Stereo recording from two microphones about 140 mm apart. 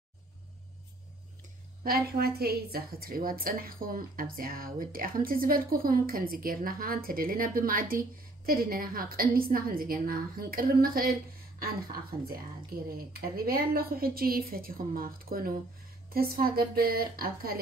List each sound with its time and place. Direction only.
1.8 s a woman's voice: 90° right